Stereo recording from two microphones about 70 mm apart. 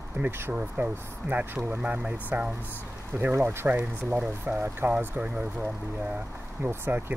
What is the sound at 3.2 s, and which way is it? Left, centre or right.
Speech, right.